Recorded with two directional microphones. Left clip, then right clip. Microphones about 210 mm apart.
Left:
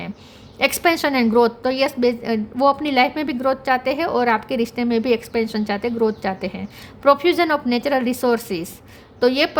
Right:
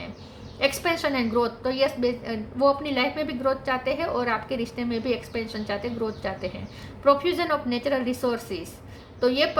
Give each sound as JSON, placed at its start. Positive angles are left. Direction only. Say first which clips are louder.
{"t": 0.6, "sound": "a woman's voice", "louder": "left 6 dB", "side_deg": 55}